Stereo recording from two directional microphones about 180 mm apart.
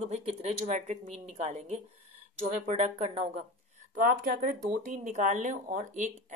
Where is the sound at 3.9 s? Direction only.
50° right (ahead or behind).